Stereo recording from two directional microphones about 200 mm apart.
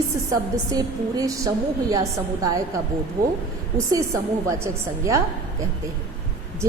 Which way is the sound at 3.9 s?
15° right (ahead or behind).